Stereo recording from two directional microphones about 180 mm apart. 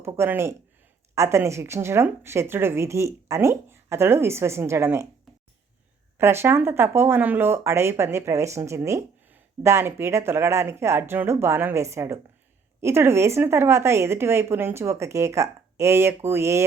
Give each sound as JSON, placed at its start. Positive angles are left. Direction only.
{"t": 0.0, "sound": "speech", "side_deg": -15}
{"t": 6.1, "sound": "speech", "side_deg": -15}